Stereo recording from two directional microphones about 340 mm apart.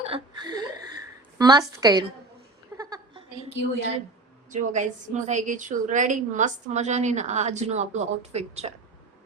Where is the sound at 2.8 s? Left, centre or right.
Centre.